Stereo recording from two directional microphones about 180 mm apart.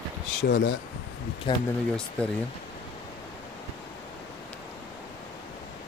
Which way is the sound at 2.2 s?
5° left (ahead or behind).